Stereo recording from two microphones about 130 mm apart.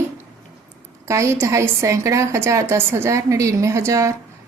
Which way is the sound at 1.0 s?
20° right (ahead or behind).